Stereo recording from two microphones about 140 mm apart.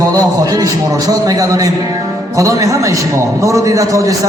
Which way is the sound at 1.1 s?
25° right (ahead or behind).